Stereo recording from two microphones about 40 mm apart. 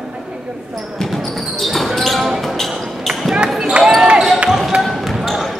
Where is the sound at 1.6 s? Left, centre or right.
Centre.